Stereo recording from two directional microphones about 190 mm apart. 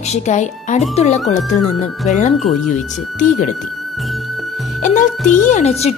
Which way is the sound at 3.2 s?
40° left (ahead or behind).